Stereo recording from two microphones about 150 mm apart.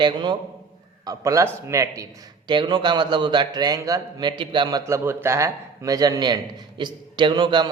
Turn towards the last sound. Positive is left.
turn(degrees=-30)  # may be behind; listen again after turning